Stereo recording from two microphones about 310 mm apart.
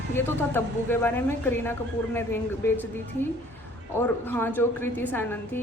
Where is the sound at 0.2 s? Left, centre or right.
Centre.